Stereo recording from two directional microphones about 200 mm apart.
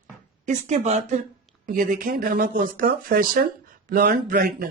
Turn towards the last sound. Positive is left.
turn(degrees=-50)  # may be behind; listen again after turning